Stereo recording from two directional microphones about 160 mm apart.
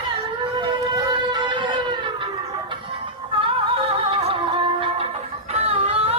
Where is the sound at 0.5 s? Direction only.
25° right (ahead or behind).